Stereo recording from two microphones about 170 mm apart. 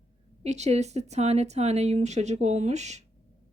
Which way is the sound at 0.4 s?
40° right (ahead or behind).